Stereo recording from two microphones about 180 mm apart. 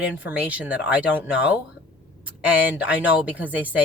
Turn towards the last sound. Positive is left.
turn(degrees=-10)  # may be behind; listen again after turning